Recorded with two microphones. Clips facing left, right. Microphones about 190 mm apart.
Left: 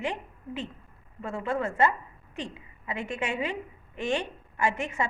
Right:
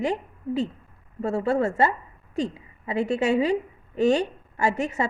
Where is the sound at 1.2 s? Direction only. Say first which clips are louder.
Right 7 dB; 40° right (ahead or behind).